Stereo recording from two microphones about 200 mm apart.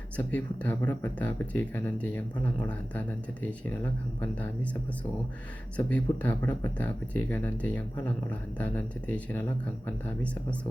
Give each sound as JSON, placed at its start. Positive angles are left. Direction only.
{"t": 0.2, "sound": "speech", "side_deg": 5}